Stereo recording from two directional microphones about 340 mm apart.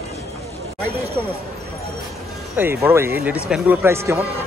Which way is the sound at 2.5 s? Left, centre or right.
Centre.